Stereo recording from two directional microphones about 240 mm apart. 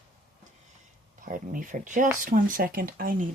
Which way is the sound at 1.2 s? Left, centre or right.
Right.